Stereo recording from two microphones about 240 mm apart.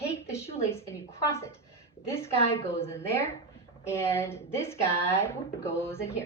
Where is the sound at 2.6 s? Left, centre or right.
Centre.